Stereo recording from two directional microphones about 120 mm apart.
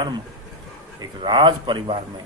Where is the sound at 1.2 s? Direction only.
40° right (ahead or behind).